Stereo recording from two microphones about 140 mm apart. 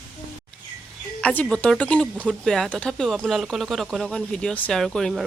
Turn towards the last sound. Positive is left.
turn(degrees=5)  # may be behind; listen again after turning